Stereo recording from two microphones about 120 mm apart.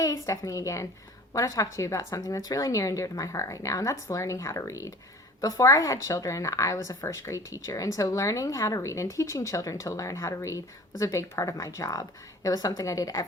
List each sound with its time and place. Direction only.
0.3 s speech: 25° left (ahead or behind)